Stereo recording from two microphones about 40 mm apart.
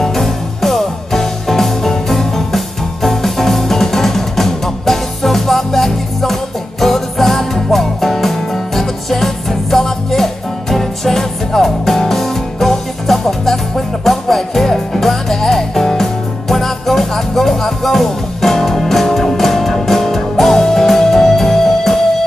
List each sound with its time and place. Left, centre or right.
0.0 s music: centre